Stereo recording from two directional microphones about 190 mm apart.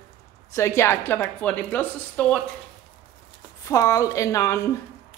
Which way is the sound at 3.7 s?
15° left (ahead or behind).